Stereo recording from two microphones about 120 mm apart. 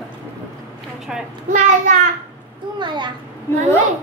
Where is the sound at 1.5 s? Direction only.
90° right.